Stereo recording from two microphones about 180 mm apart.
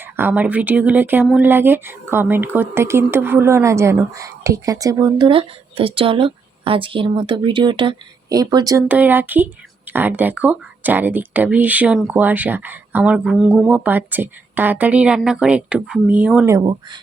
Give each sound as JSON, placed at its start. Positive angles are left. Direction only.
{"t": 0.0, "sound": "speech", "side_deg": -10}
{"t": 8.9, "sound": "speech", "side_deg": -10}
{"t": 16.6, "sound": "speech", "side_deg": -25}